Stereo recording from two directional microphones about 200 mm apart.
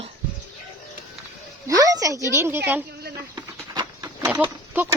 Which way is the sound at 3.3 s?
20° right (ahead or behind).